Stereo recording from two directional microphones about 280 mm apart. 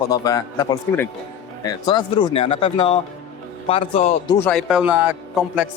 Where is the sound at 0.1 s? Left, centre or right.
Centre.